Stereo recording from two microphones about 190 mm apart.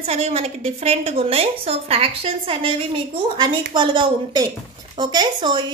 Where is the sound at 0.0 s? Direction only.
30° right (ahead or behind).